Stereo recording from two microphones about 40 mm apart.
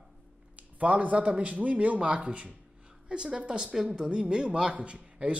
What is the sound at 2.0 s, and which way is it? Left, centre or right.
Speech, right.